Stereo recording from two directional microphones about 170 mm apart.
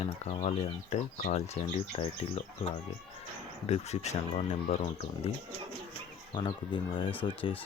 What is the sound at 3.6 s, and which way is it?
Speech, 40° left (ahead or behind).